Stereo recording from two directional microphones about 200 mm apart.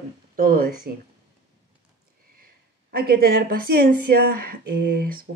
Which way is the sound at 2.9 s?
50° right (ahead or behind).